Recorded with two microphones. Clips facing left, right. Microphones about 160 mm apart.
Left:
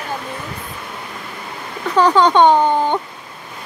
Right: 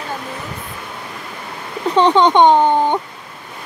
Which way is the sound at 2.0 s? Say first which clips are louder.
Right 1 dB; 20° right (ahead or behind).